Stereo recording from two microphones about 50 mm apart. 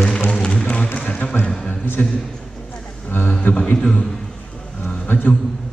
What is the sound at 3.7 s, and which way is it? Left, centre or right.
Speech, centre.